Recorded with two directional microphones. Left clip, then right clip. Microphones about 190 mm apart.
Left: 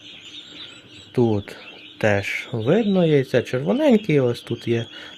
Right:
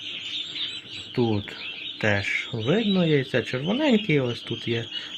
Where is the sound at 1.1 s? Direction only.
60° left (ahead or behind).